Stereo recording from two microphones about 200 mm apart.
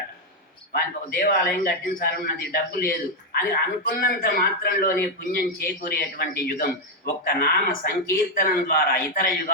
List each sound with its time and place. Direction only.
0.7 s a man's voice: 50° left (ahead or behind)